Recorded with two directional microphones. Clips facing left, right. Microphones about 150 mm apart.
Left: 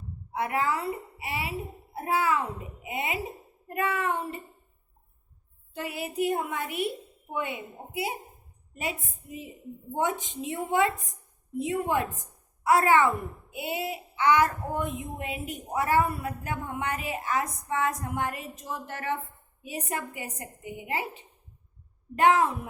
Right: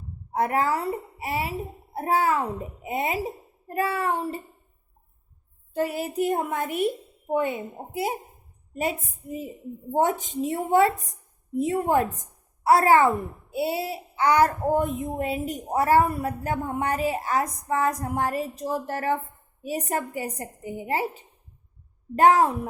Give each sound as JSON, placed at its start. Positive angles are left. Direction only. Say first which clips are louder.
{"t": 0.3, "sound": "a child's voice", "louder": "right 4 dB", "side_deg": -40}
{"t": 5.7, "sound": "a woman's voice", "louder": "right 6 dB", "side_deg": -40}